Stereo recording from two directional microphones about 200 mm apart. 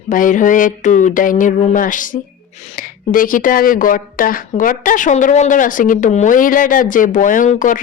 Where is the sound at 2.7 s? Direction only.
45° left (ahead or behind).